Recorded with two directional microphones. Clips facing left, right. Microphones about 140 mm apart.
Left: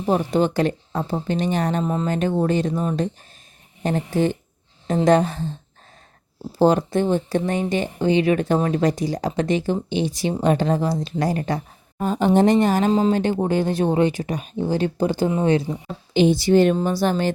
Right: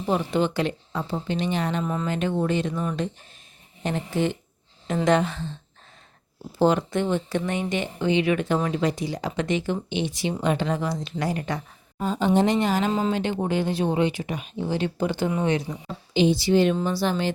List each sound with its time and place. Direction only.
0.0 s speech: 40° left (ahead or behind)
1.8 s speech: 30° left (ahead or behind)
6.6 s speech: 40° left (ahead or behind)
11.9 s speech: 55° left (ahead or behind)
12.9 s speech: 35° left (ahead or behind)
16.1 s speech: 50° left (ahead or behind)